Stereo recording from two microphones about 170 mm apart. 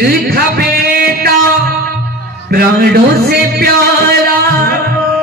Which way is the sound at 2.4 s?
60° right (ahead or behind).